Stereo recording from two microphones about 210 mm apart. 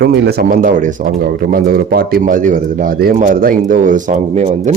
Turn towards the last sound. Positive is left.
turn(degrees=-35)  # may be behind; listen again after turning